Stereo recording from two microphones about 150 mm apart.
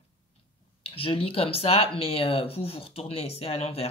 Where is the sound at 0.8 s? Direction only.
40° left (ahead or behind).